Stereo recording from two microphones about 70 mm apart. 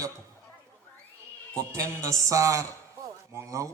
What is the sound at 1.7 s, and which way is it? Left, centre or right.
A man's voice, right.